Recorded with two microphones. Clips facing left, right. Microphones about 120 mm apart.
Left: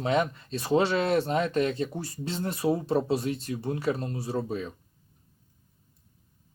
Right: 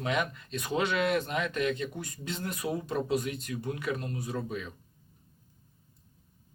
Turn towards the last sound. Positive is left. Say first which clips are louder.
# left 4 dB
turn(degrees=35)  # may be behind; listen again after turning